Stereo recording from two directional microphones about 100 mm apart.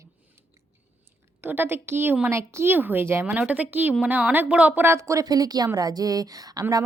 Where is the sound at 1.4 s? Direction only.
20° right (ahead or behind); by 6.8 s 40° right (ahead or behind).